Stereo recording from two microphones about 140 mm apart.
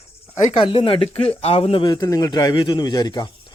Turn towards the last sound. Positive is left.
turn(degrees=30)  # may be behind; listen again after turning